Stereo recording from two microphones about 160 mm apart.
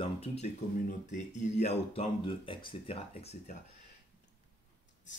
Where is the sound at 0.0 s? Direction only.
40° left (ahead or behind).